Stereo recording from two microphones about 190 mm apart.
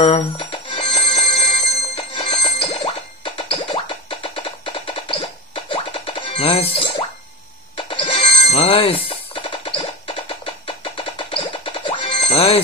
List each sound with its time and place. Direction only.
0.0 s music: 30° left (ahead or behind)